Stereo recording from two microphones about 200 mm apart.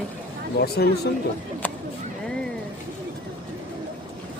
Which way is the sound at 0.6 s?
55° left (ahead or behind).